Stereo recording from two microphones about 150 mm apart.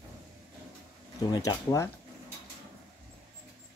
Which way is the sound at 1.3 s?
20° left (ahead or behind).